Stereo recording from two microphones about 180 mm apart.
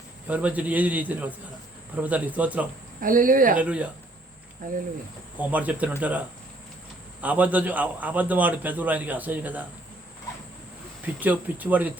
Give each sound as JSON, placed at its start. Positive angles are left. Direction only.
{"t": 0.3, "sound": "a man's voice", "side_deg": -10}
{"t": 3.0, "sound": "speech", "side_deg": -50}
{"t": 3.6, "sound": "a man's voice", "side_deg": -5}
{"t": 5.4, "sound": "a man's voice", "side_deg": -10}
{"t": 11.0, "sound": "a man's voice", "side_deg": -10}